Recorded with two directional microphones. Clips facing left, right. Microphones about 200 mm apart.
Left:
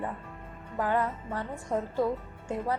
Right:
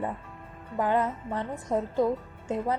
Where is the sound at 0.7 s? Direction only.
20° right (ahead or behind).